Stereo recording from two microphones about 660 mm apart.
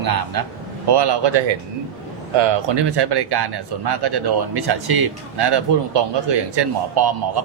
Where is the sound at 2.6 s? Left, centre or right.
Right.